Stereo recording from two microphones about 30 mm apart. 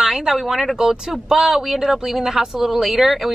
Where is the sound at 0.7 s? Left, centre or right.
Right.